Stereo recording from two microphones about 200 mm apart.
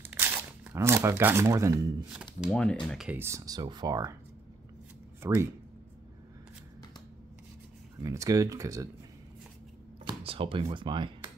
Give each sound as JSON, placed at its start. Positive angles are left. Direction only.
{"t": 0.1, "sound": "speech", "side_deg": -10}
{"t": 2.5, "sound": "speech", "side_deg": 5}
{"t": 5.2, "sound": "speech", "side_deg": -15}
{"t": 8.0, "sound": "speech", "side_deg": -15}
{"t": 10.0, "sound": "a sound", "side_deg": -25}
{"t": 10.6, "sound": "speech", "side_deg": -25}